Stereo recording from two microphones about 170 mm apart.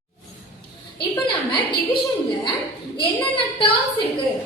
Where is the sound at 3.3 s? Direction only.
35° left (ahead or behind).